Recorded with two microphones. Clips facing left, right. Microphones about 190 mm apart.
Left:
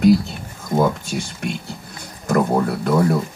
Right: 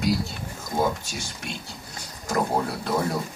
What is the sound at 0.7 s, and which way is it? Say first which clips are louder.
Speech: left 7 dB; 50° left (ahead or behind).